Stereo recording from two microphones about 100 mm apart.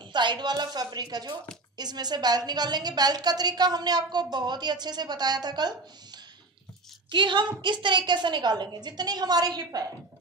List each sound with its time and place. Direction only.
0.1 s a woman's voice: 50° right (ahead or behind)
7.1 s a woman's voice: 55° right (ahead or behind)